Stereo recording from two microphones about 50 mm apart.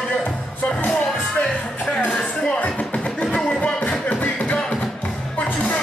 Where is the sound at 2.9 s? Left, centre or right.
Centre.